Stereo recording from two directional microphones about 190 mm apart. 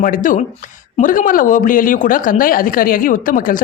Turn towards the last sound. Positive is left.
turn(degrees=45)  # may be behind; listen again after turning